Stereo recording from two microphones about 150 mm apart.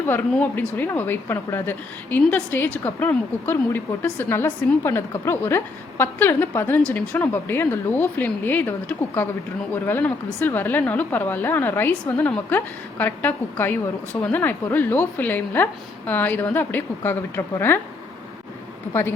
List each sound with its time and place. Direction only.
0.0 s a woman's voice: 15° left (ahead or behind)